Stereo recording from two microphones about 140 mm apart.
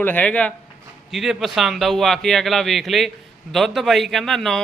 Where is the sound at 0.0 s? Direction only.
10° left (ahead or behind).